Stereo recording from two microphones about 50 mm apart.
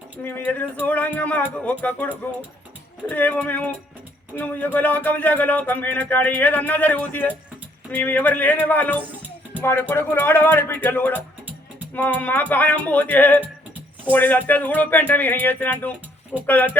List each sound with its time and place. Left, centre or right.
0.3 s speech: left
9.9 s music: left
10.8 s speech: left
16.3 s speech: left